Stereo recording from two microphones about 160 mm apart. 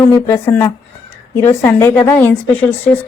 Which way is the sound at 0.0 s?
15° left (ahead or behind).